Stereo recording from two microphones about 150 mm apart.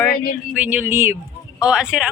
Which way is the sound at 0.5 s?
10° right (ahead or behind).